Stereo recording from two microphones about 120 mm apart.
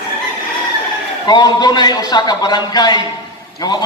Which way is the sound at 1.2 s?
35° left (ahead or behind).